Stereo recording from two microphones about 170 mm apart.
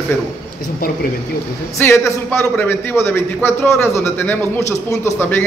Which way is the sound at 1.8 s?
15° left (ahead or behind).